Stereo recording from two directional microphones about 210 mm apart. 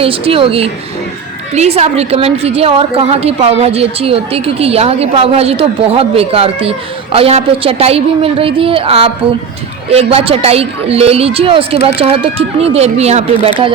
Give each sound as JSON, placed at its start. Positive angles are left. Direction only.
{"t": 0.0, "sound": "a woman's voice", "side_deg": -25}